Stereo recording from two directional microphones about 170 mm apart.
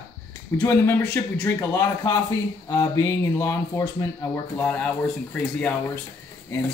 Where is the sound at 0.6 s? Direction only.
10° left (ahead or behind).